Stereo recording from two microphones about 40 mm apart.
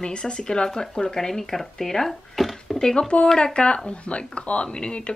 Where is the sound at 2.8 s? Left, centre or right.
Centre.